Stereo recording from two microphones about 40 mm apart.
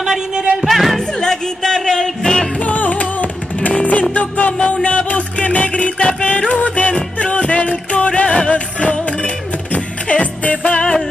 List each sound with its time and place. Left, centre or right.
0.0 s music: centre
0.7 s music: centre
0.9 s music: centre
2.6 s music: left
4.6 s music: left
10.7 s music: centre